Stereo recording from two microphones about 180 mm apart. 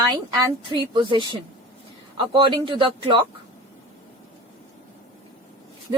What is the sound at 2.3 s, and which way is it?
Speech, 25° right (ahead or behind).